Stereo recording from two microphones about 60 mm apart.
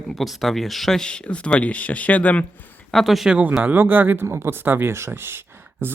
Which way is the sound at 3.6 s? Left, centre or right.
Right.